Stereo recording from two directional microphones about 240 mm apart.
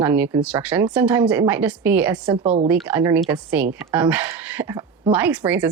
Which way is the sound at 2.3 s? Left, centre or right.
Right.